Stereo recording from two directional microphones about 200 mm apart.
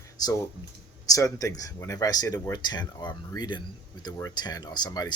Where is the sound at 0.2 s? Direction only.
20° left (ahead or behind).